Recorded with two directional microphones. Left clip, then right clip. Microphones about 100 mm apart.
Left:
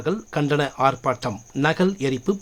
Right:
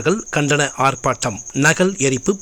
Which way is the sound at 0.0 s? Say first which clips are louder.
Right 6 dB; 35° right (ahead or behind).